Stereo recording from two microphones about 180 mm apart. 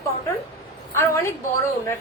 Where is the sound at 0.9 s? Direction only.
15° left (ahead or behind).